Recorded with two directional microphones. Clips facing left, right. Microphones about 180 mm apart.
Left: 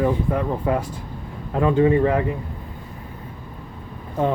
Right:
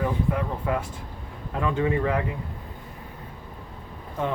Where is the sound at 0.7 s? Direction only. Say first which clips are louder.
Left 5 dB; 30° left (ahead or behind).